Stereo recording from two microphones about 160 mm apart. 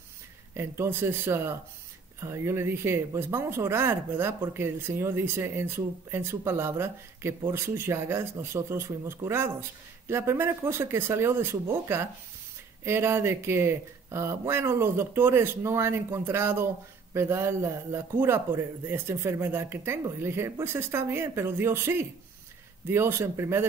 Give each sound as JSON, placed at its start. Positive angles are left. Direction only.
{"t": 0.6, "sound": "speech", "side_deg": -15}